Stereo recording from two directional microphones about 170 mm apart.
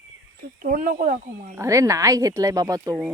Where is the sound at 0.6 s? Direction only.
55° right (ahead or behind).